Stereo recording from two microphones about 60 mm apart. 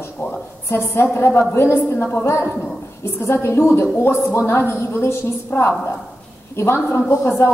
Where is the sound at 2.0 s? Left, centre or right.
Left.